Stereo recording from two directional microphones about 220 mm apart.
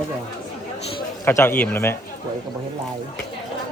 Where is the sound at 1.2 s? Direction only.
10° left (ahead or behind).